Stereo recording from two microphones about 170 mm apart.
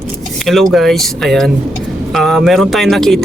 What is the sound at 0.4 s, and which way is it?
Speech, centre (ahead or behind).